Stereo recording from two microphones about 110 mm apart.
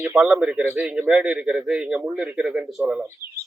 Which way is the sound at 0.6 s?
20° right (ahead or behind).